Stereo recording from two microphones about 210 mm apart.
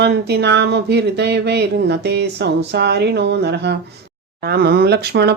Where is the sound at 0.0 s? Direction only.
55° right (ahead or behind).